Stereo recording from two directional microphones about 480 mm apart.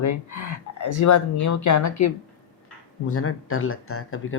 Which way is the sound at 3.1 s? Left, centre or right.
Left.